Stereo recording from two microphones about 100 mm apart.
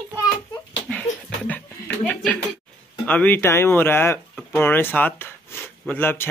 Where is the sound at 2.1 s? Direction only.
15° left (ahead or behind).